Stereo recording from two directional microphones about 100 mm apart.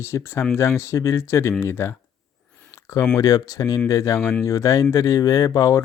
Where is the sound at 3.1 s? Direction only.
35° left (ahead or behind).